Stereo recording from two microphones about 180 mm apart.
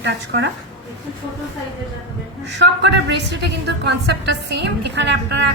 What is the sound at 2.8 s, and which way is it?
A woman's voice, 70° right (ahead or behind).